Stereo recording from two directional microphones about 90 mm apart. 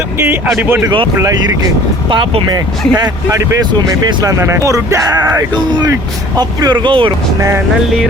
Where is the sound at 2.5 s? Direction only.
45° right (ahead or behind).